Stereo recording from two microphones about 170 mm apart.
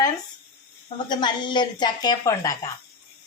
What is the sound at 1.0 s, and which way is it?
A woman's voice, 25° left (ahead or behind).